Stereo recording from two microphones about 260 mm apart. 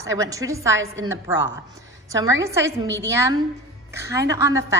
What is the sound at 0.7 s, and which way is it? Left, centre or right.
Speech, right.